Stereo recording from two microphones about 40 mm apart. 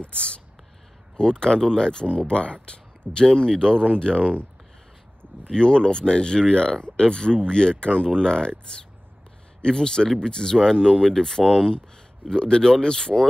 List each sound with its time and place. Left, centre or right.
0.0 s speech: left
5.5 s speech: centre